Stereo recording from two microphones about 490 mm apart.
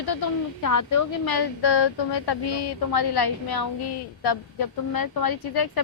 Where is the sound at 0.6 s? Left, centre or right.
Left.